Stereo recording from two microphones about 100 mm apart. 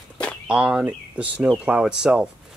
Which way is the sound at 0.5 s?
10° right (ahead or behind).